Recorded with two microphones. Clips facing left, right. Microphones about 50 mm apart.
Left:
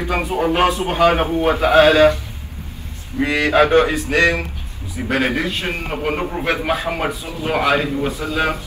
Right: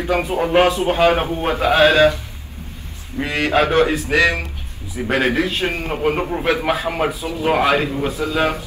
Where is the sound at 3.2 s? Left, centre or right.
Left.